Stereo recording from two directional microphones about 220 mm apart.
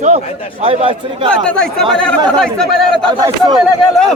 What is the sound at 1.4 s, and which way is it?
Speech, 5° left (ahead or behind).